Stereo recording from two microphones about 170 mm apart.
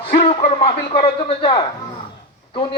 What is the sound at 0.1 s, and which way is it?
A man's voice, 35° left (ahead or behind).